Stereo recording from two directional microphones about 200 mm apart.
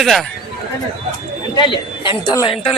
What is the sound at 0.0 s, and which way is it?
Speech, centre (ahead or behind).